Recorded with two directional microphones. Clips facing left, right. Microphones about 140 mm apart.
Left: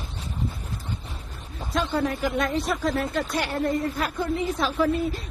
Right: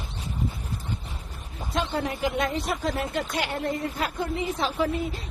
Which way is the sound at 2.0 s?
15° right (ahead or behind).